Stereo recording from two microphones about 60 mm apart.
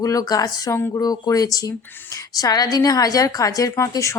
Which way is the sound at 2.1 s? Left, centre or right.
Left.